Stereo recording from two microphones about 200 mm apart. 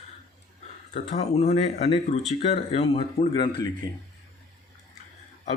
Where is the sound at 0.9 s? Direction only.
35° left (ahead or behind); by 3.7 s 20° left (ahead or behind).